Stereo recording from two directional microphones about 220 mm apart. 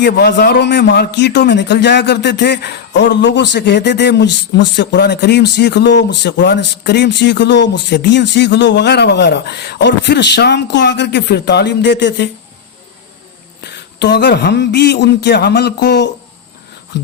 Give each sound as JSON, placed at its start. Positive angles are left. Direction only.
{"t": 0.0, "sound": "speech", "side_deg": 50}
{"t": 13.7, "sound": "speech", "side_deg": 50}